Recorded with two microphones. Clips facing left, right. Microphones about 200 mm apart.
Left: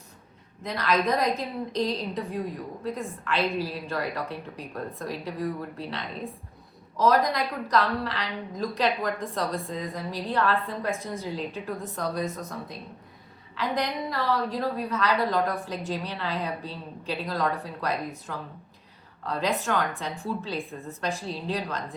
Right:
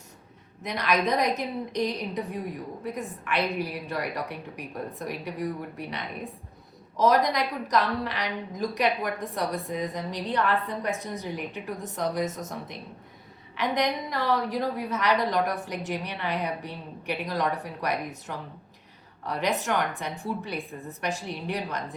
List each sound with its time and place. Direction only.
0.6 s a woman's voice: 20° right (ahead or behind)
13.6 s a woman's voice: 20° right (ahead or behind)